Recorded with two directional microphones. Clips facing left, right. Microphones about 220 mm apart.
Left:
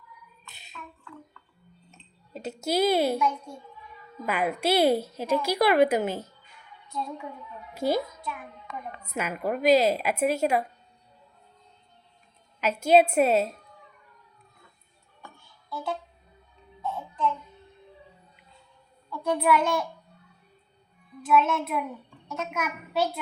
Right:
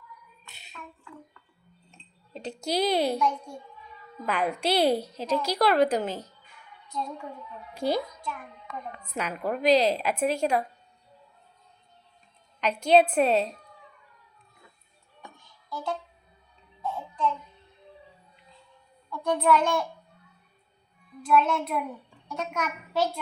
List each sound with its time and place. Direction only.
1.9 s a child's voice: 5° left (ahead or behind)
6.9 s music: 5° left (ahead or behind)
7.7 s a woman's voice: 5° left (ahead or behind)
9.0 s a woman's voice: 5° left (ahead or behind)
12.5 s a woman's voice: 5° left (ahead or behind)
15.4 s music: 5° left (ahead or behind)
19.1 s a woman's voice: 5° left (ahead or behind)
21.2 s music: 5° left (ahead or behind)
22.3 s a woman's voice: 5° left (ahead or behind)